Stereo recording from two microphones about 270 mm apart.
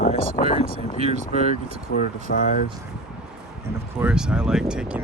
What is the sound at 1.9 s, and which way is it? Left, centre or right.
Speech, left.